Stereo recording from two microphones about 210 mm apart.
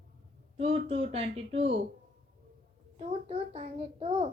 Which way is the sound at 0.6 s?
30° right (ahead or behind).